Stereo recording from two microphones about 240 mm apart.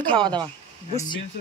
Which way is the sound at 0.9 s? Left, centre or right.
Centre.